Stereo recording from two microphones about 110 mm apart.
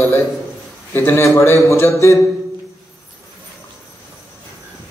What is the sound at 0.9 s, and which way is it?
A man's voice, 25° left (ahead or behind).